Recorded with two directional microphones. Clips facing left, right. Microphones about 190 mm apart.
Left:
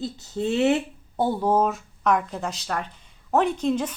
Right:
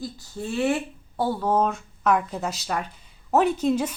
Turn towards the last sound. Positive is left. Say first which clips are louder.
# right 1 dB
turn(degrees=-10)  # may be behind; listen again after turning